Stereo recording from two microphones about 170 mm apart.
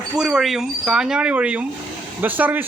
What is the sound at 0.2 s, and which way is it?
A man's voice, 5° right (ahead or behind).